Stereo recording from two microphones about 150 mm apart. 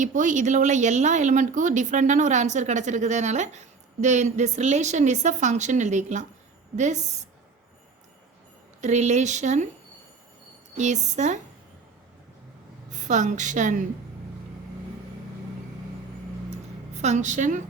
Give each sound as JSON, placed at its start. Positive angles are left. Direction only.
{"t": 0.0, "sound": "speech", "side_deg": -60}
{"t": 8.8, "sound": "speech", "side_deg": -50}
{"t": 10.8, "sound": "speech", "side_deg": -50}
{"t": 12.9, "sound": "a woman's voice", "side_deg": -55}
{"t": 16.9, "sound": "speech", "side_deg": -50}